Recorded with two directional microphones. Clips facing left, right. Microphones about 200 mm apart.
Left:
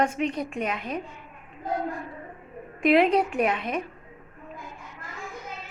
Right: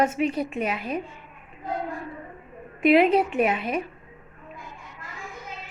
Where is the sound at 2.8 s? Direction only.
5° right (ahead or behind).